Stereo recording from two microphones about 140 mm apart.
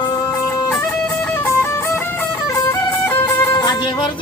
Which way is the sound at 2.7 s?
15° left (ahead or behind).